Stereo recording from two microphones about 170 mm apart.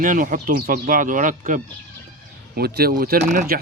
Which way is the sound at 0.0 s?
50° right (ahead or behind).